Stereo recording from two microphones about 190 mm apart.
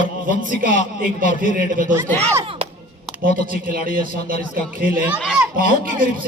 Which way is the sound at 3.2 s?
45° right (ahead or behind).